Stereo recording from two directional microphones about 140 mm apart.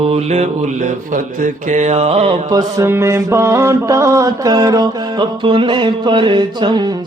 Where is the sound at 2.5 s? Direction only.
25° right (ahead or behind).